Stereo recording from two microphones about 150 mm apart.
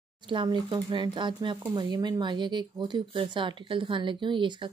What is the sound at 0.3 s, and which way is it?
Speech, 35° right (ahead or behind).